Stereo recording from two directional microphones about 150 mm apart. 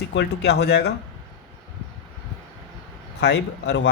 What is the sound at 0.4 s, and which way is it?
Speech, 90° left.